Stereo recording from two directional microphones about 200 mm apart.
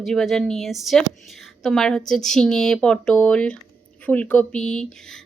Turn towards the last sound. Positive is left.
turn(degrees=5)  # may be behind; listen again after turning